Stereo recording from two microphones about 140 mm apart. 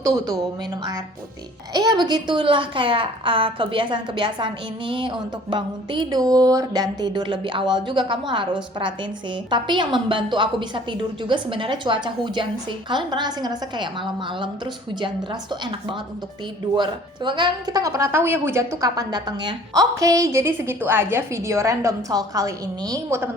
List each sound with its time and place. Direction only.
1.7 s a woman's voice: 30° right (ahead or behind)
9.5 s a woman's voice: 35° right (ahead or behind)